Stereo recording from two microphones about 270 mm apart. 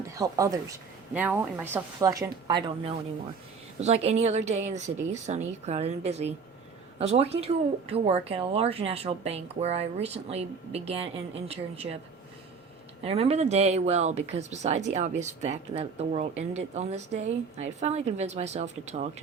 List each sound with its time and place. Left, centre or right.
0.1 s a woman's voice: centre
13.1 s speech: right